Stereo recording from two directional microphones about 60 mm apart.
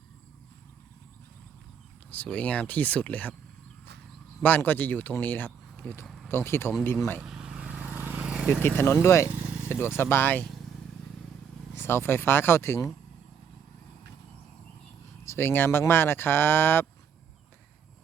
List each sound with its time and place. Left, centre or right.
2.0 s speech: left
4.4 s speech: left
6.2 s speech: left
7.3 s vehicle: centre; by 8.3 s right
8.3 s vehicle: centre
8.6 s speech: left
11.7 s speech: left
15.2 s speech: left